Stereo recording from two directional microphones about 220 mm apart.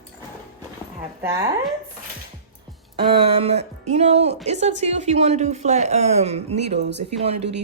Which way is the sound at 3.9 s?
30° right (ahead or behind).